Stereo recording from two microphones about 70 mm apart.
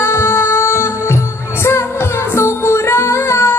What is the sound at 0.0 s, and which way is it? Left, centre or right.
Music, left.